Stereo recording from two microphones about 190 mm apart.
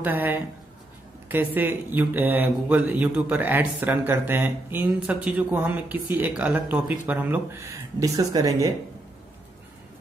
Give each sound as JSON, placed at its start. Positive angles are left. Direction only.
{"t": 0.0, "sound": "speech", "side_deg": -10}